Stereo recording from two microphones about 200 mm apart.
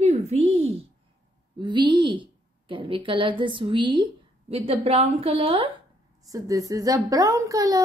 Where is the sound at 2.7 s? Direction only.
25° right (ahead or behind).